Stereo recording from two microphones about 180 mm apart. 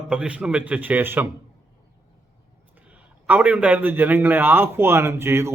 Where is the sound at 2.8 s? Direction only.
10° right (ahead or behind).